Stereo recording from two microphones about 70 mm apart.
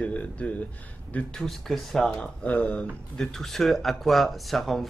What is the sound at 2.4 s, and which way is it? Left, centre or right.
Speech, centre.